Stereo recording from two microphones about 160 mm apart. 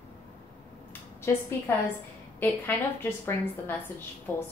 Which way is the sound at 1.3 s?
15° left (ahead or behind).